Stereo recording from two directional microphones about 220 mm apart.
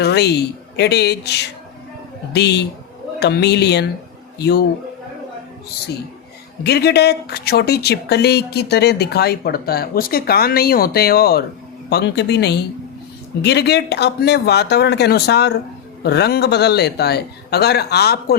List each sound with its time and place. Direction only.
0.0 s speech: 50° left (ahead or behind)
6.7 s speech: 50° left (ahead or behind)